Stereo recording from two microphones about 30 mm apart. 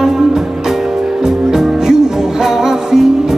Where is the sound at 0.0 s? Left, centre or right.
Centre.